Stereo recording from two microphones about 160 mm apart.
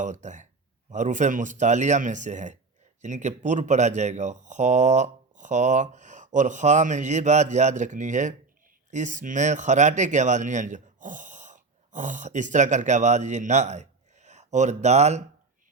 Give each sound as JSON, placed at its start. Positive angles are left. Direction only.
{"t": 0.0, "sound": "speech", "side_deg": -50}